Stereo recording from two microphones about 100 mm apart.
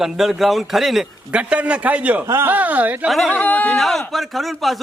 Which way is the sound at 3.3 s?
15° left (ahead or behind).